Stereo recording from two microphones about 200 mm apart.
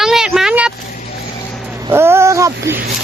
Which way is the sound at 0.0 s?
5° right (ahead or behind).